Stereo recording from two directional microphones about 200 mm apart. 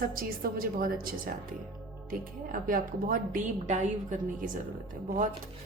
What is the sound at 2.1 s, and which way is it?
A woman's voice, 45° right (ahead or behind).